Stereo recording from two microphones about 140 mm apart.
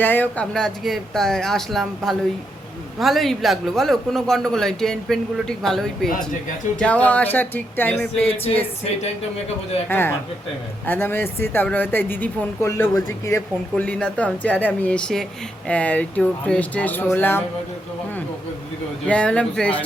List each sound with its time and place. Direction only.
0.0 s a man's voice: 15° left (ahead or behind)
9.9 s speech: 15° left (ahead or behind)
19.0 s speech: 10° left (ahead or behind)